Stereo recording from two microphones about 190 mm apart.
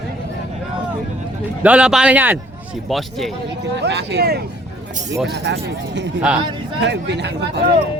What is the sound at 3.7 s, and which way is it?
Speech, 60° right (ahead or behind).